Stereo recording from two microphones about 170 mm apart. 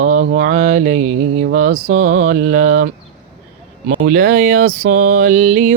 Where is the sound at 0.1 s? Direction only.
55° right (ahead or behind).